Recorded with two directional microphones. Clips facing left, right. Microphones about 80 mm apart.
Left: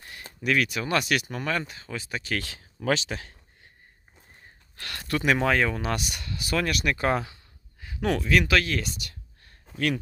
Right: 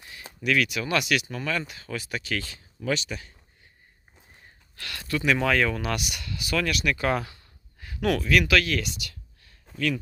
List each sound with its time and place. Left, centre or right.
0.4 s speech: left
2.4 s speech: left
4.8 s speech: left
7.2 s a sound: centre
8.3 s speech: left